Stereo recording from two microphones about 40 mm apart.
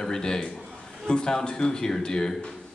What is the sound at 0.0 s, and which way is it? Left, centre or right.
A man's voice, centre.